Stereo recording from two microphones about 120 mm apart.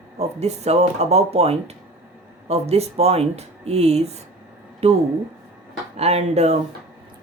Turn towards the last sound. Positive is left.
turn(degrees=-60)  # may be behind; listen again after turning